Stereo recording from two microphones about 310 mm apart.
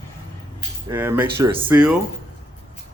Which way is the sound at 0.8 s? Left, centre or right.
Centre.